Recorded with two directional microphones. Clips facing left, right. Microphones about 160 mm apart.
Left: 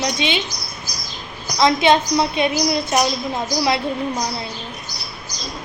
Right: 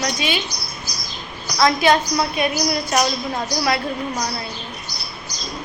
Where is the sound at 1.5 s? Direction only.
20° left (ahead or behind).